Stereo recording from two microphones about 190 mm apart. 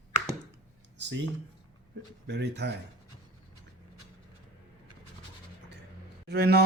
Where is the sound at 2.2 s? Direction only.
65° right (ahead or behind).